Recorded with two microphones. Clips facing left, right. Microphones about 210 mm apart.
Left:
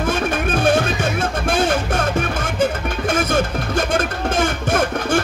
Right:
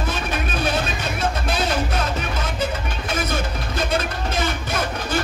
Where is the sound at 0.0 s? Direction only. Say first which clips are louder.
Left 6 dB; 50° left (ahead or behind).